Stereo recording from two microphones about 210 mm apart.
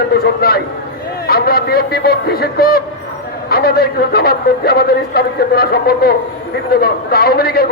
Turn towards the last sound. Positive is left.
turn(degrees=45)  # may be behind; listen again after turning